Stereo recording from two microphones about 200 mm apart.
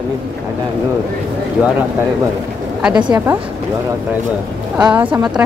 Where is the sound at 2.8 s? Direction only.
5° right (ahead or behind).